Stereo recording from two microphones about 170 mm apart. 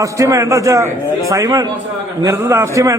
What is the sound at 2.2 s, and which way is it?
Laughter, 15° right (ahead or behind).